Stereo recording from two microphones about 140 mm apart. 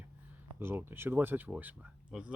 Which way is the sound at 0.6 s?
15° right (ahead or behind).